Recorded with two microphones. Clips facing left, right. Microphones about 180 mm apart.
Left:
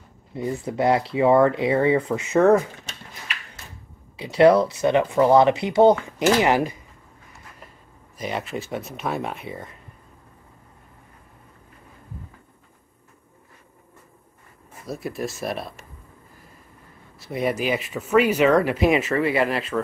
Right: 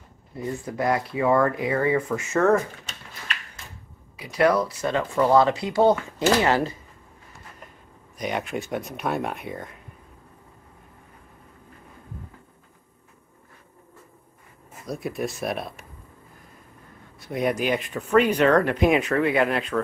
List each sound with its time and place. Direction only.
0.3 s speech: 20° left (ahead or behind)
4.2 s speech: 25° left (ahead or behind)
8.2 s speech: centre (ahead or behind)
14.9 s speech: centre (ahead or behind)
17.2 s speech: centre (ahead or behind)